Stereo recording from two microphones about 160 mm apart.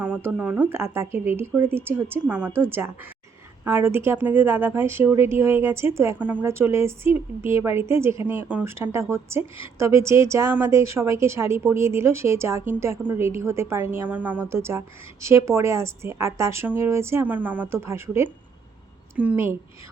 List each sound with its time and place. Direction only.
0.0 s a woman's voice: 10° right (ahead or behind)